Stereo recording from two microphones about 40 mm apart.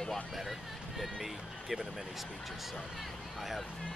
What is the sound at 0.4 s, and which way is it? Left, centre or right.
Speech, centre.